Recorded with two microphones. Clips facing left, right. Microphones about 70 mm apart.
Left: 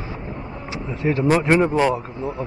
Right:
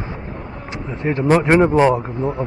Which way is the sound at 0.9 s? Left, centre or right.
Right.